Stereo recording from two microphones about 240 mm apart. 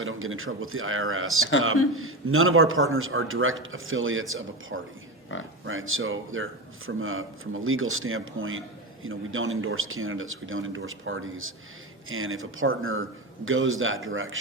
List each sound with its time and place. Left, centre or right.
0.0 s a man's voice: right